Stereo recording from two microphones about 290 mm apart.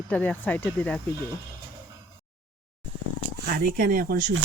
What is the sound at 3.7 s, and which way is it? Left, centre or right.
Speech, right.